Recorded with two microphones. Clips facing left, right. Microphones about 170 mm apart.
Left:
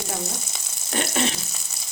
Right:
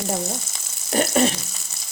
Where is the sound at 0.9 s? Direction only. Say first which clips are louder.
Right 6 dB; 40° right (ahead or behind).